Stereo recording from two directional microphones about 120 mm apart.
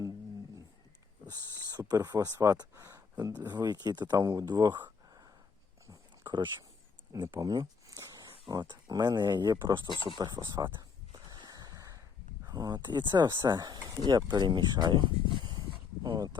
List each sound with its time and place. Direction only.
1.3 s speech: 30° right (ahead or behind)
5.9 s a sound: 40° right (ahead or behind)
7.1 s speech: 30° right (ahead or behind)
7.9 s a sound: 25° right (ahead or behind)
8.2 s speech: 40° right (ahead or behind)
9.9 s speech: 40° left (ahead or behind)
10.2 s speech: 40° right (ahead or behind)
10.8 s a sound: 35° right (ahead or behind)
12.5 s speech: 35° right (ahead or behind)
16.0 s speech: 30° right (ahead or behind)